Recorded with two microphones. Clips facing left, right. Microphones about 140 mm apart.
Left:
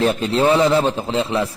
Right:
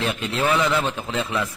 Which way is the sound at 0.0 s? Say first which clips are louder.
Left 7 dB; 35° left (ahead or behind).